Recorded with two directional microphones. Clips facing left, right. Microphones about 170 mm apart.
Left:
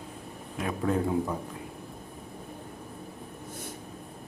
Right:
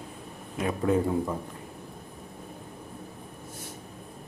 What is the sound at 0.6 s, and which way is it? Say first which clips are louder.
Speech: right 3 dB; 5° right (ahead or behind).